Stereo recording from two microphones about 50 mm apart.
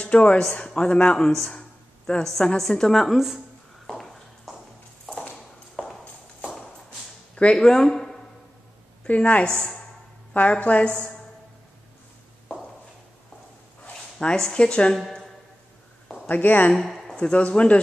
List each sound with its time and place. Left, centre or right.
0.0 s speech: left
1.3 s speech: centre
3.1 s speech: centre
3.8 s a sound: centre
5.8 s clip-clop: centre
7.5 s speech: centre
9.0 s speech: left
14.2 s speech: centre
15.0 s a woman's voice: centre
16.3 s speech: left
16.7 s a sound: centre
17.2 s speech: left